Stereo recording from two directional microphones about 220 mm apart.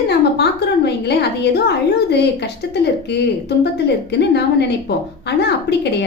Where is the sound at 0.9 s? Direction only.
50° left (ahead or behind).